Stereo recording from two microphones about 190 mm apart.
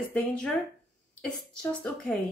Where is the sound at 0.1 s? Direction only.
5° left (ahead or behind).